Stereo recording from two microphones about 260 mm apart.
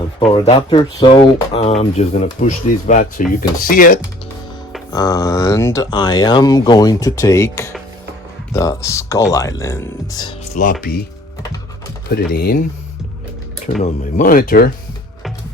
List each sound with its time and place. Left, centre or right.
0.3 s speech: left
4.9 s speech: centre; by 10.8 s left
12.0 s speech: left
13.8 s speech: left